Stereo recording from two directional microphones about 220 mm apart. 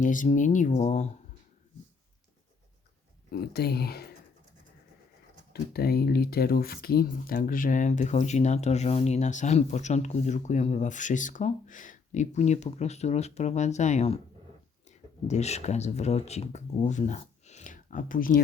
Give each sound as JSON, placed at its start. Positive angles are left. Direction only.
{"t": 0.0, "sound": "speech", "side_deg": 35}
{"t": 3.2, "sound": "speech", "side_deg": 45}
{"t": 5.7, "sound": "speech", "side_deg": 45}